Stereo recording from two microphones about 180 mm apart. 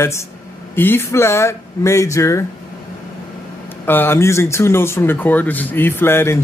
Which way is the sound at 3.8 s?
10° left (ahead or behind).